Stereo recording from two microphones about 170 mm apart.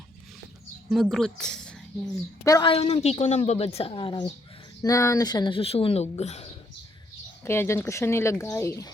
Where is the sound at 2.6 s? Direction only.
35° left (ahead or behind).